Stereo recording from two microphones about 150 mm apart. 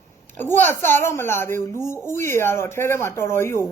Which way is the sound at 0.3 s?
15° left (ahead or behind).